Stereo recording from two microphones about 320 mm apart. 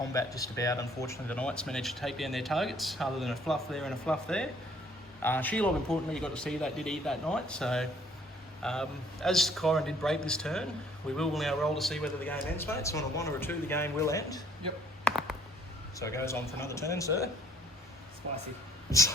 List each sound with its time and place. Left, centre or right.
0.1 s a man's voice: centre
15.0 s a sound: centre
16.0 s a man's voice: centre
18.9 s speech: centre